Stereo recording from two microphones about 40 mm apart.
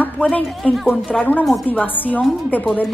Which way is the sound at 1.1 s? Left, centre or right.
Left.